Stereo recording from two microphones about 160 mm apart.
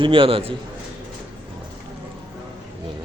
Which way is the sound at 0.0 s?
35° right (ahead or behind).